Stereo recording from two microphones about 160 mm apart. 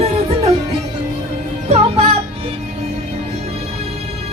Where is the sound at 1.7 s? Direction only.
40° right (ahead or behind).